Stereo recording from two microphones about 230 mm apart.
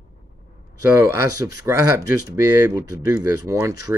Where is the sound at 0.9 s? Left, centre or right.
Centre.